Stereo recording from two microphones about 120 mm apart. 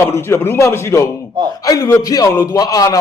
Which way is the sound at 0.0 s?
20° left (ahead or behind).